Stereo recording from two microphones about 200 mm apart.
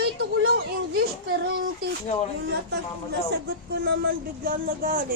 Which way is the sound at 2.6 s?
55° right (ahead or behind).